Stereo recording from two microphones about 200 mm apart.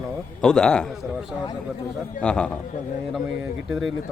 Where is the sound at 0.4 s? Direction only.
5° left (ahead or behind).